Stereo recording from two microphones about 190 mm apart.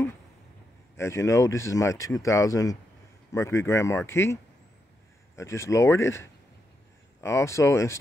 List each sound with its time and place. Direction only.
0.9 s speech: 15° left (ahead or behind)